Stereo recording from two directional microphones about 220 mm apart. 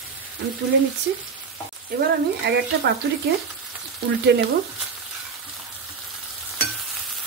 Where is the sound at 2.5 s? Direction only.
50° right (ahead or behind).